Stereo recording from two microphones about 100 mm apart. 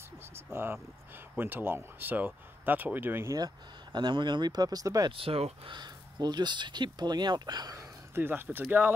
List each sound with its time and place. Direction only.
0.5 s speech: 25° right (ahead or behind)
3.3 s speech: 45° right (ahead or behind)
5.1 s speech: 70° right (ahead or behind)
5.8 s speech: 45° right (ahead or behind)
7.7 s speech: 20° right (ahead or behind)